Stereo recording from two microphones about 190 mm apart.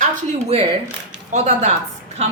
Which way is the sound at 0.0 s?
35° right (ahead or behind).